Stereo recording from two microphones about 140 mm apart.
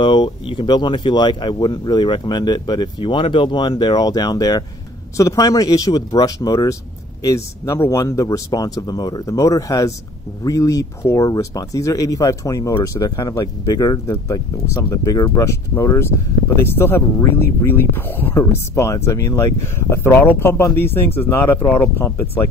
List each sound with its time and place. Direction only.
0.0 s speech: 35° left (ahead or behind); by 22.5 s 15° left (ahead or behind)